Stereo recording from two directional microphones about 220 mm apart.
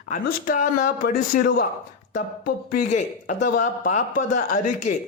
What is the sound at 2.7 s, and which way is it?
A man's voice, 35° left (ahead or behind).